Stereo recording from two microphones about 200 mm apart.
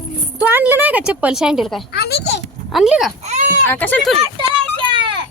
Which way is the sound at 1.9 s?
55° left (ahead or behind).